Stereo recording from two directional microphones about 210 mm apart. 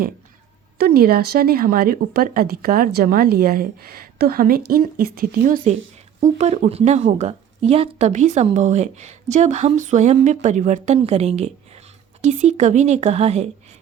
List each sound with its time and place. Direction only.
0.8 s a woman's voice: 45° right (ahead or behind); by 13.5 s 30° right (ahead or behind)